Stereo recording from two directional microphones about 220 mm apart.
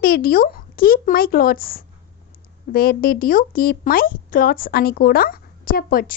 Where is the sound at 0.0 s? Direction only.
40° left (ahead or behind).